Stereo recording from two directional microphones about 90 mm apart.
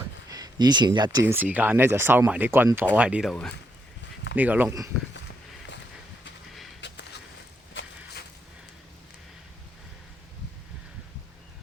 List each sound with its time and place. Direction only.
0.3 s speech: 45° right (ahead or behind)
1.2 s speech: 25° right (ahead or behind)
4.4 s speech: 20° right (ahead or behind)